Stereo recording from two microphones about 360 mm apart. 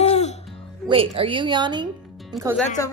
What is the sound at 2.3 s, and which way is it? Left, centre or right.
Speech, centre.